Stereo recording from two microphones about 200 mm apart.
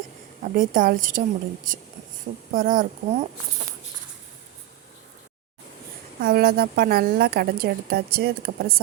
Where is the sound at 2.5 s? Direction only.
45° right (ahead or behind).